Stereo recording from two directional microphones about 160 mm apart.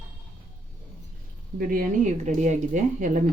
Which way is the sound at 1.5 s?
55° right (ahead or behind).